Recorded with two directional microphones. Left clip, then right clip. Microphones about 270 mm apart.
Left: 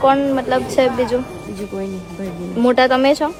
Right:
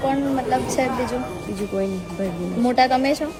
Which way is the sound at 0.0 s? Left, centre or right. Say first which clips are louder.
Left 7 dB; left.